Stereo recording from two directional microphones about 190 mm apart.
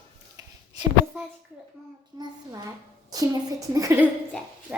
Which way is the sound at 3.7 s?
15° right (ahead or behind).